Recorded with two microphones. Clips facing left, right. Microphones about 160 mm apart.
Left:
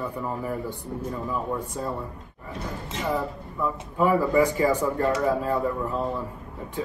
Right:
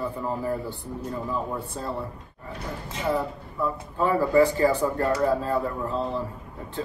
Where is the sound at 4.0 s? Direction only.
10° left (ahead or behind).